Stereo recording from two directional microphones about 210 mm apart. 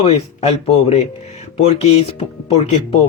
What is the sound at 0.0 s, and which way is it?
Speech, 30° left (ahead or behind).